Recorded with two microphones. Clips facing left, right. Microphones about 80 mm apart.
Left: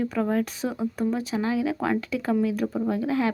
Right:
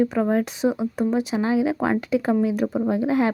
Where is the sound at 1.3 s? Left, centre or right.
Right.